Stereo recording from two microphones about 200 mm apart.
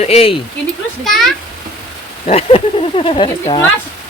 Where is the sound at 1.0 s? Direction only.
Centre (ahead or behind).